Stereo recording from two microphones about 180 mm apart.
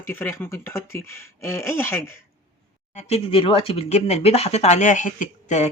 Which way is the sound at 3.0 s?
35° left (ahead or behind).